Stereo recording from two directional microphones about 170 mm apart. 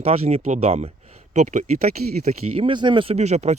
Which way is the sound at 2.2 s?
30° right (ahead or behind).